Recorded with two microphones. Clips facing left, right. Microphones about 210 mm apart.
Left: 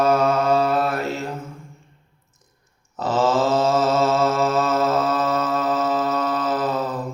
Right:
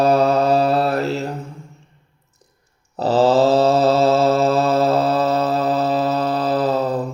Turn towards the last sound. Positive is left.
turn(degrees=-30)  # may be behind; listen again after turning